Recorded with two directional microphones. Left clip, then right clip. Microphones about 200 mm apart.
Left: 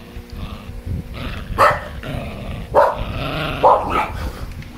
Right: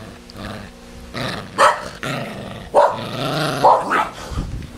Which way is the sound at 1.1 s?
30° right (ahead or behind).